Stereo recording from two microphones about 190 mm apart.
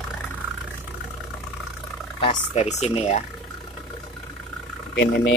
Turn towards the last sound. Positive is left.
turn(degrees=65)  # may be behind; listen again after turning